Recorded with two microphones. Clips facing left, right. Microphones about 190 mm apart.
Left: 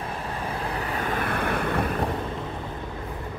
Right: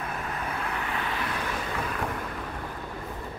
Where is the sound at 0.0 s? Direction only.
30° left (ahead or behind); by 2.0 s 60° left (ahead or behind).